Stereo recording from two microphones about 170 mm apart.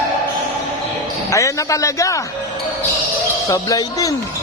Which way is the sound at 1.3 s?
20° left (ahead or behind).